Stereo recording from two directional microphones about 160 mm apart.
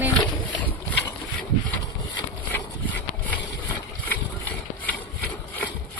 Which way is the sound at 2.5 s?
10° left (ahead or behind).